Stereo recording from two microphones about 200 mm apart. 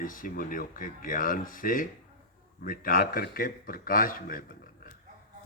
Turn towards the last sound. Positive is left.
turn(degrees=45)  # may be behind; listen again after turning